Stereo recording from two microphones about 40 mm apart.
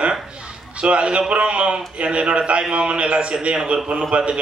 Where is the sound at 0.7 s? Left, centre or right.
Right.